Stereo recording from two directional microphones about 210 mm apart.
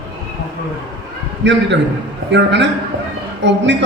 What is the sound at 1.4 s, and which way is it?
A woman's voice, 55° right (ahead or behind).